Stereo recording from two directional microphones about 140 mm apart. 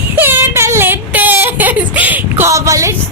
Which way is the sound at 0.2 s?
15° right (ahead or behind).